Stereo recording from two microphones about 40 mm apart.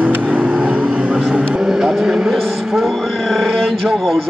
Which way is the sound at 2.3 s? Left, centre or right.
Centre.